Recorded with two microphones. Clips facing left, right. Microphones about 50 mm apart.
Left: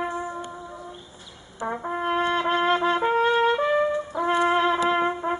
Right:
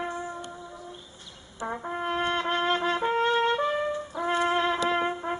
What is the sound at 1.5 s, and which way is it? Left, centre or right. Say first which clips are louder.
Brass instrument: left 4 dB; centre.